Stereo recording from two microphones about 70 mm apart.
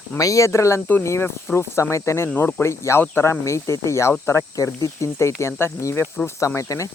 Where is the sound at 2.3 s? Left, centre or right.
Left.